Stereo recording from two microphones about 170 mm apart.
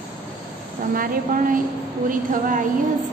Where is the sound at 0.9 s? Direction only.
55° right (ahead or behind).